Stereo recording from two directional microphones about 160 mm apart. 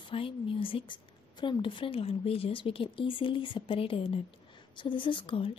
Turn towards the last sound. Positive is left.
turn(degrees=35)  # may be behind; listen again after turning